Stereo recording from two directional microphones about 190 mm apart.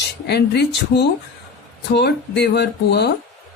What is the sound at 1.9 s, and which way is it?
Speech, 60° left (ahead or behind).